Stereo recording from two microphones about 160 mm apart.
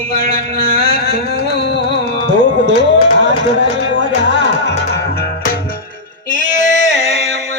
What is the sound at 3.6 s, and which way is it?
Music, 90° left.